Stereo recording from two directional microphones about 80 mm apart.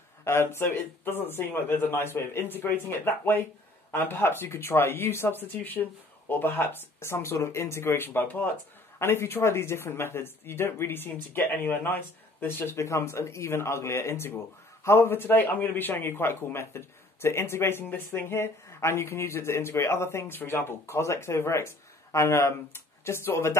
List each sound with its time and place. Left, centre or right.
0.2 s a man's voice: left